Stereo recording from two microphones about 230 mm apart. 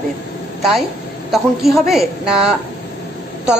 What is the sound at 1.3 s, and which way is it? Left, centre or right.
A woman's voice, centre.